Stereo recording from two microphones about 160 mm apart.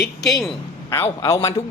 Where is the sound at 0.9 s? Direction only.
20° left (ahead or behind).